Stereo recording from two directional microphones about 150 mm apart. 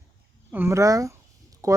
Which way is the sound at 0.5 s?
15° right (ahead or behind).